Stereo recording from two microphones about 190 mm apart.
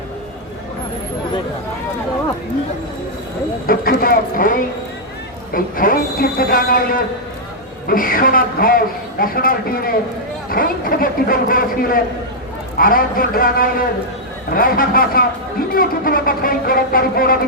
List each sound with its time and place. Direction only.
3.7 s a sound: 50° left (ahead or behind)
5.5 s speech: 50° left (ahead or behind)
7.9 s speech: 50° left (ahead or behind)